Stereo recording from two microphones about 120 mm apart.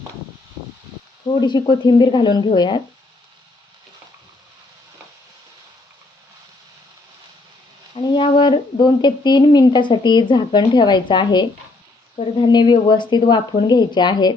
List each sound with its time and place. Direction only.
1.4 s speech: 35° left (ahead or behind)
8.0 s speech: 40° left (ahead or behind)
12.1 s speech: 50° left (ahead or behind)
12.5 s speech: 35° left (ahead or behind)